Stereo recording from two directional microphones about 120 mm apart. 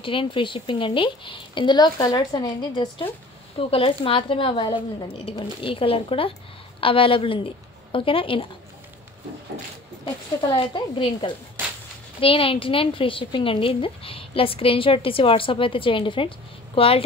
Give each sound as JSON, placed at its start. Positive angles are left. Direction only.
{"t": 0.0, "sound": "a woman's voice", "side_deg": 45}
{"t": 10.5, "sound": "a woman's voice", "side_deg": 45}